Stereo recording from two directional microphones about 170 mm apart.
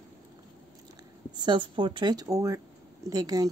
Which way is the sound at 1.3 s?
30° right (ahead or behind).